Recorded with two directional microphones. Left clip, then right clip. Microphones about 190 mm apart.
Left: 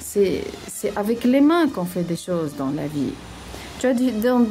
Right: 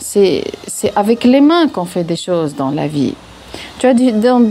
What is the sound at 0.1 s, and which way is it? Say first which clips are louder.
Speech: right 8 dB; 25° right (ahead or behind).